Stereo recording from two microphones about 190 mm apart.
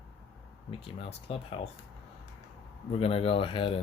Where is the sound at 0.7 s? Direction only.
30° left (ahead or behind).